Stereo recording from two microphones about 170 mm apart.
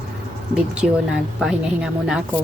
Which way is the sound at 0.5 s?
5° right (ahead or behind).